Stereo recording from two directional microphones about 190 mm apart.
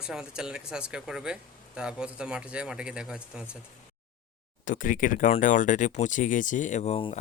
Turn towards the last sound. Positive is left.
turn(degrees=30)  # may be behind; listen again after turning